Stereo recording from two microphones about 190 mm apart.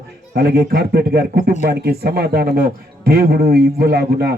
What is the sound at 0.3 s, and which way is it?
A man's voice, 55° right (ahead or behind).